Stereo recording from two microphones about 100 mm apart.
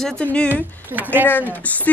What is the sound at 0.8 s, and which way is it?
Speech, 20° right (ahead or behind).